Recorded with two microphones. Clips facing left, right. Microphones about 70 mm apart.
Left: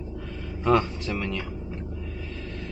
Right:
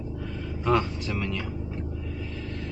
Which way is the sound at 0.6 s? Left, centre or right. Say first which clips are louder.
Left 2 dB; centre.